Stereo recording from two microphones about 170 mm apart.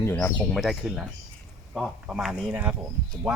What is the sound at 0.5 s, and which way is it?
Speech, centre (ahead or behind).